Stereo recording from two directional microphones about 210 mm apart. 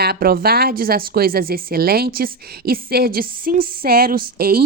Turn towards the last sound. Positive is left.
turn(degrees=-45)  # may be behind; listen again after turning